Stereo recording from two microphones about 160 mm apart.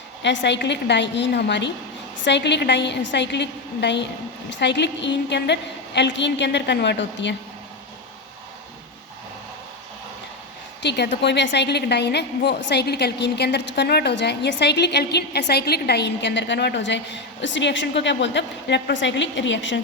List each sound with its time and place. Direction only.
0.2 s a woman's voice: 90° left
10.8 s a woman's voice: 90° left